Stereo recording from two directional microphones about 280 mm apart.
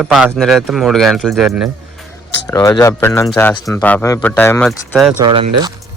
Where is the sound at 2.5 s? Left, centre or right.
Centre.